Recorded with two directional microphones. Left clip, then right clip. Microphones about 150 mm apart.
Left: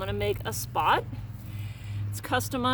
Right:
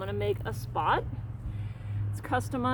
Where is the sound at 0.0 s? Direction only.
90° left.